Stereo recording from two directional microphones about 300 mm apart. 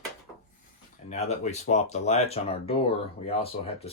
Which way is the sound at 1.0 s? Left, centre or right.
Left.